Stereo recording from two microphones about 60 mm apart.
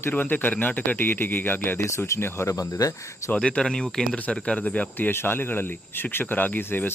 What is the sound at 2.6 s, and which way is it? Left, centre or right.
Speech, left.